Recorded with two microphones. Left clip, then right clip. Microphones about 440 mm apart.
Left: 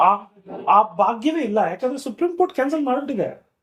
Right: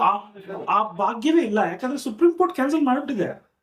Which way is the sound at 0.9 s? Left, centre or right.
Left.